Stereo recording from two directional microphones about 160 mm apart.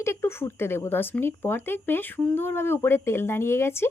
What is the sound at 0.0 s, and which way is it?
Speech, 15° left (ahead or behind).